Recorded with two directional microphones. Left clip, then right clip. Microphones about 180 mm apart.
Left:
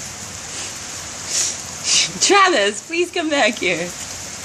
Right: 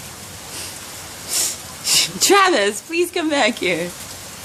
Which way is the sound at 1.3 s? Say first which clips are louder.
Left 1 dB; 15° right (ahead or behind).